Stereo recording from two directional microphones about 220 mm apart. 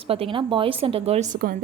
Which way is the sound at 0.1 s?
25° right (ahead or behind).